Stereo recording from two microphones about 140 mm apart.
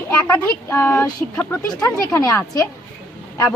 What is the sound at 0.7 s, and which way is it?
Speech, 15° left (ahead or behind).